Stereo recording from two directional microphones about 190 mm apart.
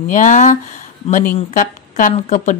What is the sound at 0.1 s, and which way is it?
Speech, 40° left (ahead or behind).